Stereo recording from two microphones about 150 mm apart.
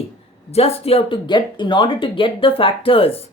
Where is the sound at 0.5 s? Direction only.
40° left (ahead or behind).